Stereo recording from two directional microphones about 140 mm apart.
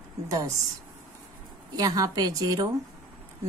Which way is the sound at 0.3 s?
25° right (ahead or behind).